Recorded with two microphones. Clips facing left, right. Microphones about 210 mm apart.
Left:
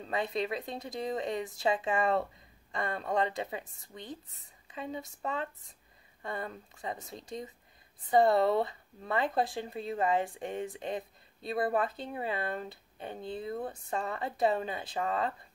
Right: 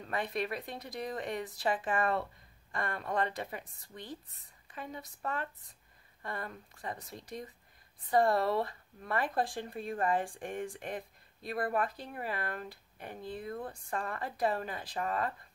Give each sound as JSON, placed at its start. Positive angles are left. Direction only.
{"t": 0.0, "sound": "speech", "side_deg": 25}
{"t": 4.6, "sound": "speech", "side_deg": 25}